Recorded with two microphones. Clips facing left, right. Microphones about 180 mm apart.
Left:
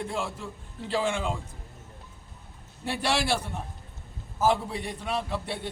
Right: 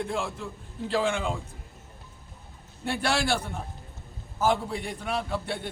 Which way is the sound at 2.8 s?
5° left (ahead or behind).